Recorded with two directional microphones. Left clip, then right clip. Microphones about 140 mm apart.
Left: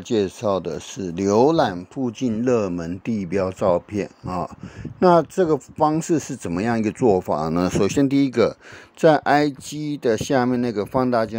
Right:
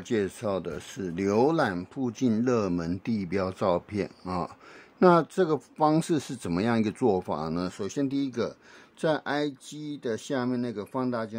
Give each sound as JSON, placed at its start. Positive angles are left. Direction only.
{"t": 0.1, "sound": "speech", "side_deg": 20}
{"t": 7.5, "sound": "speech", "side_deg": 60}